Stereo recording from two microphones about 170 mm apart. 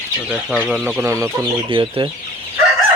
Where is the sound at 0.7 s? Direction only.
5° right (ahead or behind).